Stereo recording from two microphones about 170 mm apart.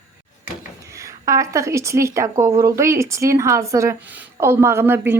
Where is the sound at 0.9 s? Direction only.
20° right (ahead or behind).